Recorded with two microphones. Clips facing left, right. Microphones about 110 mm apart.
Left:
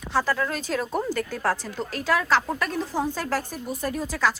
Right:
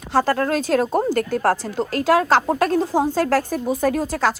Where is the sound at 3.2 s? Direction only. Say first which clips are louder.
Right 9 dB; 80° right.